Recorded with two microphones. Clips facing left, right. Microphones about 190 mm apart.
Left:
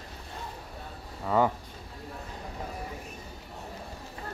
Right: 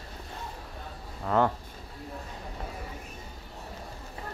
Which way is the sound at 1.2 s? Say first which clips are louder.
Even; 5° left (ahead or behind).